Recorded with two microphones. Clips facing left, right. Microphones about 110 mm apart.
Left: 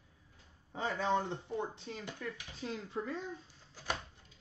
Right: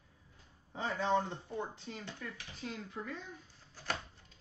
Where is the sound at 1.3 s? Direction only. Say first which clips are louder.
Left 2 dB; 20° left (ahead or behind).